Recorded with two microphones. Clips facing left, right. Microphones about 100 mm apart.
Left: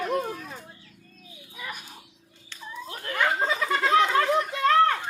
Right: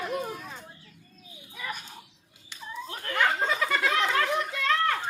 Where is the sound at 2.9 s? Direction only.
25° left (ahead or behind).